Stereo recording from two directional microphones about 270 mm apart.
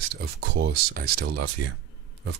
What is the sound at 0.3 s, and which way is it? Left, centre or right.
Speech, right.